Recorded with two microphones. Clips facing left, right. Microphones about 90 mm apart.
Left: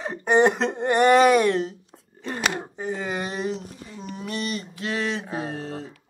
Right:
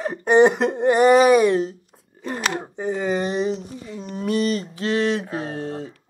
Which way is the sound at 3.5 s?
Centre (ahead or behind).